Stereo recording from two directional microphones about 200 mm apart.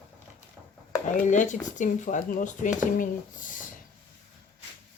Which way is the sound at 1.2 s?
40° left (ahead or behind).